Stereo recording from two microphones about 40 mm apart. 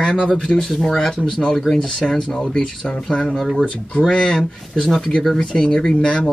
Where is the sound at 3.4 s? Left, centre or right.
Centre.